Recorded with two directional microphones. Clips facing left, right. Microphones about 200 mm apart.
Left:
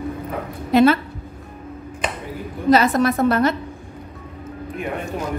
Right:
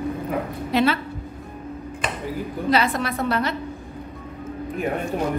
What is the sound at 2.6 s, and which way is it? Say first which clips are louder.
Speech: left 7 dB; 45° left (ahead or behind).